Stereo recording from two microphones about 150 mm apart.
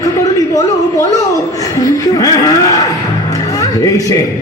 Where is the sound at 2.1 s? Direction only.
25° left (ahead or behind).